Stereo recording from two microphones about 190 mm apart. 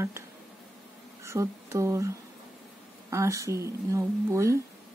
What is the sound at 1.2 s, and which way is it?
Speech, 15° right (ahead or behind).